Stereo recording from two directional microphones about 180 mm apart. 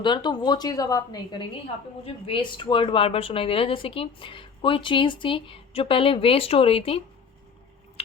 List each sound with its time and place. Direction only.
0.0 s a woman's voice: 25° left (ahead or behind)